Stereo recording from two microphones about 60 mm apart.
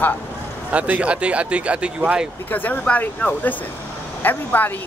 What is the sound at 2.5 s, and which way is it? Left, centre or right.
Speech, left.